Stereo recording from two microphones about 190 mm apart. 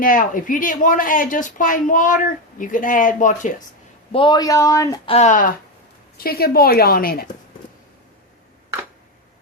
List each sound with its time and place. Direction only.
0.0 s speech: 45° left (ahead or behind)
4.1 s speech: 25° left (ahead or behind)
5.0 s speech: 35° left (ahead or behind)
6.1 s speech: 55° left (ahead or behind)